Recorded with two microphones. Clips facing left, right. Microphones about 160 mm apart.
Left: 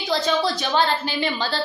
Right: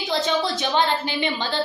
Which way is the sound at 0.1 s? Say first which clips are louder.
Left 2 dB; 20° right (ahead or behind).